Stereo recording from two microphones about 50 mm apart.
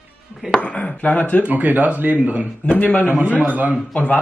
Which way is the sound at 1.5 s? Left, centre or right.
Right.